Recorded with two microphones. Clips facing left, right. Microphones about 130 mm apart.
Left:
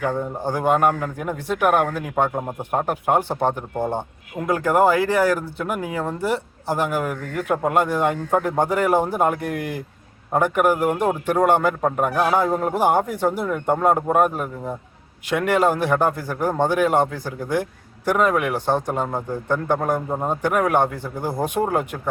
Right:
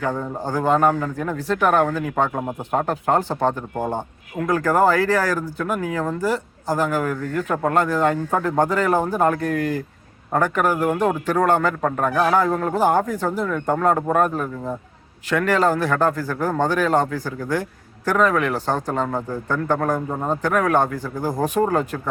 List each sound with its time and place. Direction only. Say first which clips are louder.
0.0 s a man's voice: left 1 dB; 15° left (ahead or behind)
4.4 s a man's voice: even; 20° left (ahead or behind)